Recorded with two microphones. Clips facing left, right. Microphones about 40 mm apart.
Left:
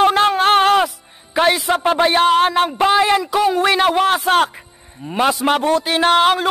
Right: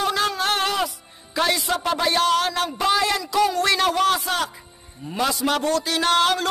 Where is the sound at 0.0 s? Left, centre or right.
Left.